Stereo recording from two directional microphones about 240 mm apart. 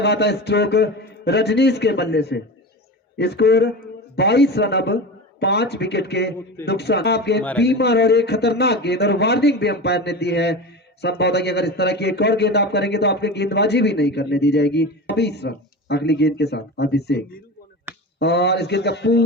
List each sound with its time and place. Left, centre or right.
0.0 s speech: left
17.9 s a sound: centre
18.2 s speech: left